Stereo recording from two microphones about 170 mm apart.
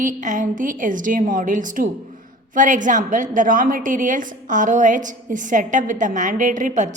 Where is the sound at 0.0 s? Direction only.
50° right (ahead or behind).